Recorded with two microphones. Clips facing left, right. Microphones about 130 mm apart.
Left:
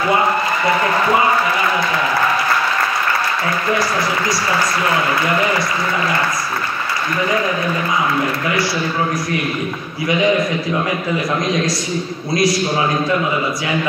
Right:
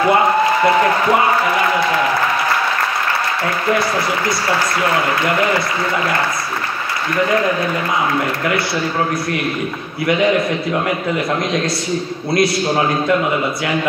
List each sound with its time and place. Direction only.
12.4 s a man's voice: 60° right (ahead or behind)